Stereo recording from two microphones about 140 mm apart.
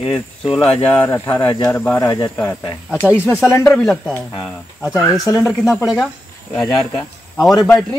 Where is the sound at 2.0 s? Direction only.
30° left (ahead or behind).